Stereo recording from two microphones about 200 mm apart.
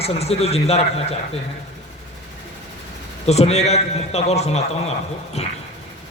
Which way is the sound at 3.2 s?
30° left (ahead or behind).